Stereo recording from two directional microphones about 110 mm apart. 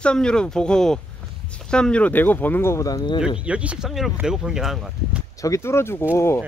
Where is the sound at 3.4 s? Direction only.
10° right (ahead or behind).